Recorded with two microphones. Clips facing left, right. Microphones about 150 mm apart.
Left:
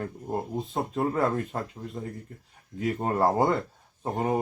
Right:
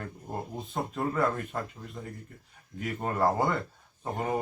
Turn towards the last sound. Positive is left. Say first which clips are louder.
# left 4 dB
turn(degrees=25)  # may be behind; listen again after turning